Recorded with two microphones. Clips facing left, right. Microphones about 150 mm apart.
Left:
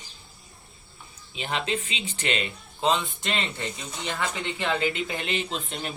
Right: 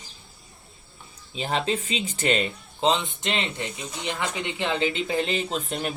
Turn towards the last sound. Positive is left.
turn(degrees=-45)  # may be behind; listen again after turning